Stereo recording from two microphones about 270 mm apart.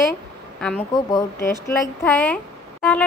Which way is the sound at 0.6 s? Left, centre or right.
Centre.